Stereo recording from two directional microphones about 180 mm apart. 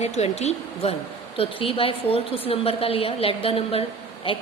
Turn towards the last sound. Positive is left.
turn(degrees=30)  # may be behind; listen again after turning